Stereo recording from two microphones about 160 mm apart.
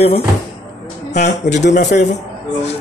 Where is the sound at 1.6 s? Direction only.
45° left (ahead or behind).